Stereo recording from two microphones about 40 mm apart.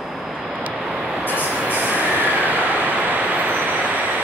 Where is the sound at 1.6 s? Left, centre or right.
Right.